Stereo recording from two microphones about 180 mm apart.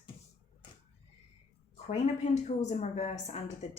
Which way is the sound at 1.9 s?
40° left (ahead or behind).